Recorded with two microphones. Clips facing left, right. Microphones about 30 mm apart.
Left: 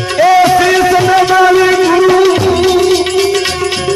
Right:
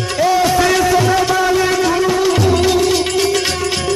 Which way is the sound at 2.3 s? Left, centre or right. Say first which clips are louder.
Left 4 dB; left.